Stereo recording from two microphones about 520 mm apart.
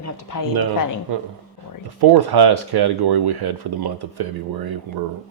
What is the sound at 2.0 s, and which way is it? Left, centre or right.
Speech, right.